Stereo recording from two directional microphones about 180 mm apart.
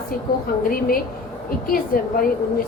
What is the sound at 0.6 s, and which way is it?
A woman's voice, 55° left (ahead or behind).